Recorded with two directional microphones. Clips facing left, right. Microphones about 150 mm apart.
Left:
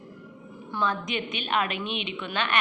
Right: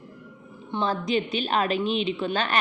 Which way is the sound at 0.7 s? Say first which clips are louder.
Right 4 dB; 30° right (ahead or behind).